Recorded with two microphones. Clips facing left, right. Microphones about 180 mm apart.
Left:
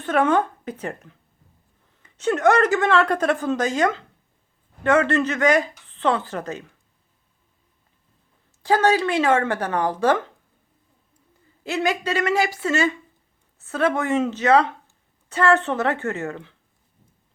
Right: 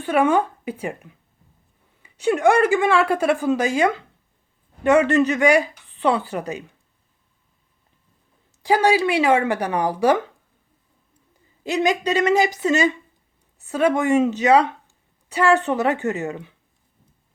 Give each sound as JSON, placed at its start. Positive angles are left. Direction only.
{"t": 0.0, "sound": "a woman's voice", "side_deg": -10}
{"t": 8.6, "sound": "a woman's voice", "side_deg": -15}
{"t": 11.6, "sound": "a woman's voice", "side_deg": -20}